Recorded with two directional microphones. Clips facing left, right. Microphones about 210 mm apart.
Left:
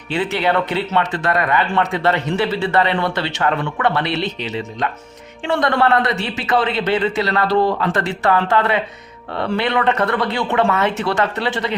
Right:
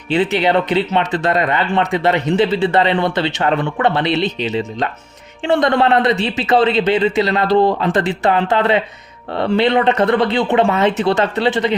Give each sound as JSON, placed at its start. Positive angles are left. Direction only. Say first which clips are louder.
{"t": 0.1, "sound": "speech", "louder": "right 4 dB", "side_deg": -20}